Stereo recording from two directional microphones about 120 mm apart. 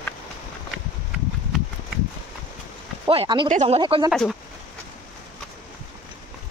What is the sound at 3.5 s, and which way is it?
Speech, 75° right (ahead or behind).